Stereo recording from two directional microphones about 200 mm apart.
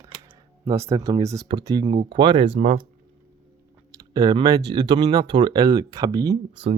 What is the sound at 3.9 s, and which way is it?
Speech, 20° right (ahead or behind).